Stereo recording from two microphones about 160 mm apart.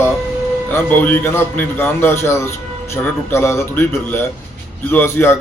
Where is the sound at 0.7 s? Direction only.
10° left (ahead or behind).